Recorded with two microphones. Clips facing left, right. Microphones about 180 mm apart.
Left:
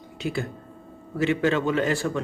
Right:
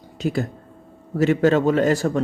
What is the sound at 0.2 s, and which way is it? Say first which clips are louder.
A man's voice: right 5 dB; 40° right (ahead or behind).